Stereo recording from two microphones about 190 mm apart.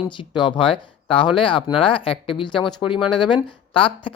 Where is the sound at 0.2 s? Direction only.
25° left (ahead or behind).